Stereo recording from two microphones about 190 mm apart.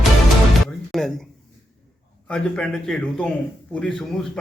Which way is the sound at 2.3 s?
5° left (ahead or behind).